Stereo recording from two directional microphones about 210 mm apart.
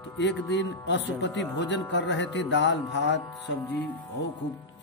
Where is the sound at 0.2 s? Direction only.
55° left (ahead or behind).